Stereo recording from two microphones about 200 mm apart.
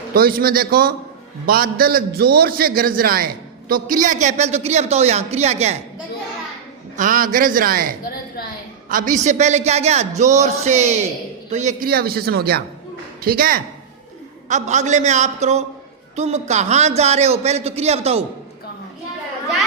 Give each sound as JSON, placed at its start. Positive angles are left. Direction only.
{"t": 0.1, "sound": "a man's voice", "side_deg": -50}
{"t": 6.9, "sound": "a man's voice", "side_deg": -40}
{"t": 14.4, "sound": "speech", "side_deg": -35}